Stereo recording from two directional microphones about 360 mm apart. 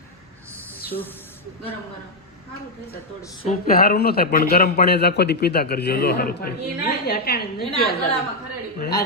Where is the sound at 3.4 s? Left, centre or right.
Left.